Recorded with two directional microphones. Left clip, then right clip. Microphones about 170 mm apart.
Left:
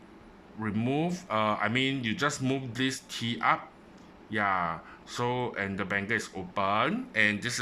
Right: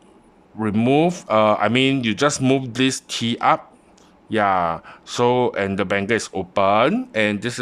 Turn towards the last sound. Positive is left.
turn(degrees=-60)  # may be behind; listen again after turning